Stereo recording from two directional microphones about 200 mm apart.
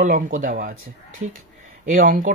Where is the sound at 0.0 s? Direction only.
40° right (ahead or behind).